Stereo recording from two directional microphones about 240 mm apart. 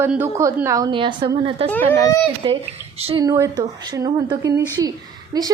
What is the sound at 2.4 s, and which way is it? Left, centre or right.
A woman's voice, right.